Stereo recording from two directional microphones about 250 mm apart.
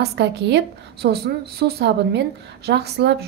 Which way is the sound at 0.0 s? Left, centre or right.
Right.